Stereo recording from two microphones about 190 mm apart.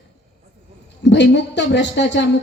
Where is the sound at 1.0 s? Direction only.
65° left (ahead or behind).